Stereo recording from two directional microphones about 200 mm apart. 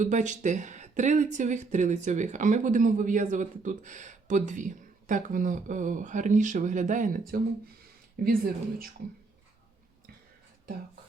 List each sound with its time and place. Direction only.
0.0 s speech: 40° right (ahead or behind)